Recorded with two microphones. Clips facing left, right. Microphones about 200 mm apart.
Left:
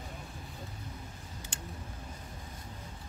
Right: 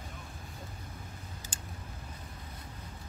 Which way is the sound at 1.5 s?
65° left (ahead or behind).